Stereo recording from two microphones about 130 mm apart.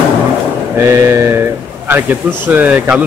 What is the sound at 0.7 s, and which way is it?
Speech, 20° right (ahead or behind).